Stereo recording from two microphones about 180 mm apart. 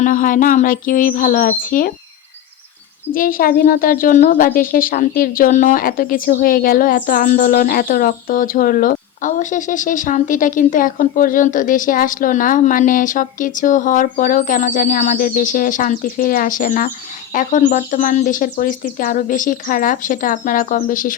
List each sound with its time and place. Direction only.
0.0 s speech: 50° left (ahead or behind)
3.1 s speech: 50° left (ahead or behind)